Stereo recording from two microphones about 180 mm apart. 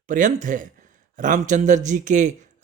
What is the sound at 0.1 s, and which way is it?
A man's voice, 45° right (ahead or behind).